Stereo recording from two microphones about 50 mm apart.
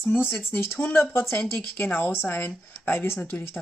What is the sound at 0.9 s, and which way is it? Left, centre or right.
Speech, left.